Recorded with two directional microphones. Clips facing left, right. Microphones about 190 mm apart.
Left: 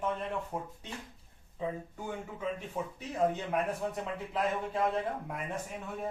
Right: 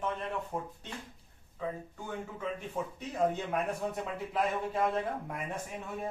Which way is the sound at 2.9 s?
Centre (ahead or behind).